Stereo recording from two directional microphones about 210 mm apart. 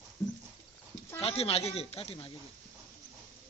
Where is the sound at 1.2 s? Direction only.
30° left (ahead or behind).